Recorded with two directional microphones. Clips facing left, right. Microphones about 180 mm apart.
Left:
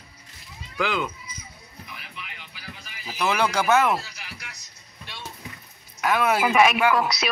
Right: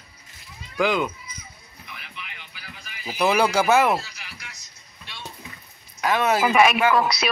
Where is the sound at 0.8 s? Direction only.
15° right (ahead or behind).